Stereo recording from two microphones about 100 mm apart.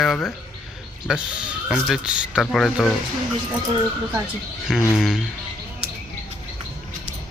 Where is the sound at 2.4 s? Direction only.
5° left (ahead or behind).